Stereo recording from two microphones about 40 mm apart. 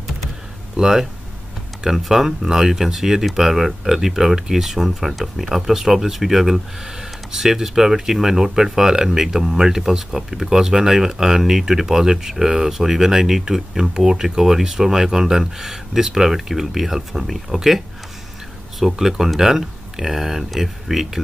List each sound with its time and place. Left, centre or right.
0.7 s speech: centre